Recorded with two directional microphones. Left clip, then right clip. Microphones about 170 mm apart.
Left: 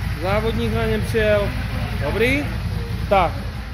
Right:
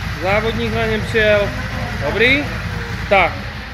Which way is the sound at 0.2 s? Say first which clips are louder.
Right 4 dB; 10° left (ahead or behind).